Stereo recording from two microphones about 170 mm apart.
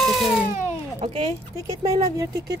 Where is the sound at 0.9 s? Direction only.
40° right (ahead or behind).